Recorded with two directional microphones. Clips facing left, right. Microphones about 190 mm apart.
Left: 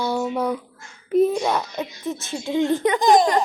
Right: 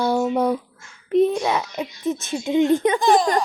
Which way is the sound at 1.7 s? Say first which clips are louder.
Right 3 dB; 20° right (ahead or behind).